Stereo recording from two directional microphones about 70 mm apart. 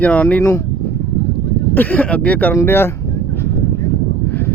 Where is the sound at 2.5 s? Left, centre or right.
Left.